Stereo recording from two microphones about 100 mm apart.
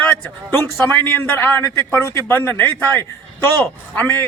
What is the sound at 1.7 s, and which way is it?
A man's voice, 30° left (ahead or behind).